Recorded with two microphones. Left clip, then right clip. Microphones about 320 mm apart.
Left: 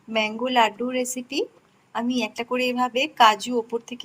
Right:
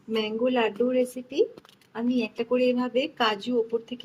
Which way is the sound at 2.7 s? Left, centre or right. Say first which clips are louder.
Left 6 dB; left.